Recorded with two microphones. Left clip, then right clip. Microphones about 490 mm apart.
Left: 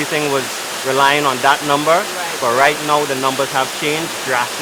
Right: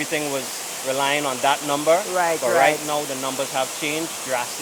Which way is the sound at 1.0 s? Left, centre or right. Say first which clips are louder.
Left 8 dB; right.